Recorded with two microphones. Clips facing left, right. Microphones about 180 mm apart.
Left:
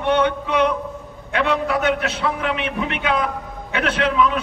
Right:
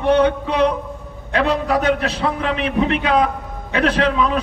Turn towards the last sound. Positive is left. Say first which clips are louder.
# right 2 dB
turn(degrees=-35)  # may be behind; listen again after turning